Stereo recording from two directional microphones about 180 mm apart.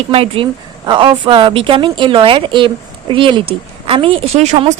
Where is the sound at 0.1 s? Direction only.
35° right (ahead or behind).